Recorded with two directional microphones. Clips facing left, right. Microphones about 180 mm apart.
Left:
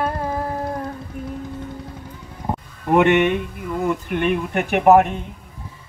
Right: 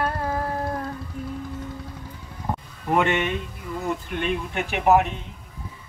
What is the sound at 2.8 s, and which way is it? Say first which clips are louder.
Speech: left 7 dB; 60° left (ahead or behind).